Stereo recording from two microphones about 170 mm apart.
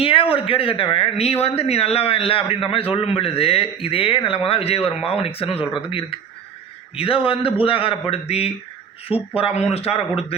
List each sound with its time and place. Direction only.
0.0 s a man's voice: 35° left (ahead or behind)